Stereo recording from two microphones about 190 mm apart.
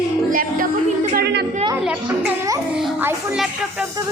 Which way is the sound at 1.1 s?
60° right (ahead or behind).